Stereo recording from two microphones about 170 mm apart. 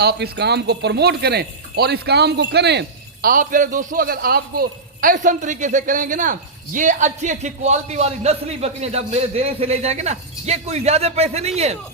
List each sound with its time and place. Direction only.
0.0 s a man's voice: 75° right (ahead or behind); by 11.8 s 40° right (ahead or behind)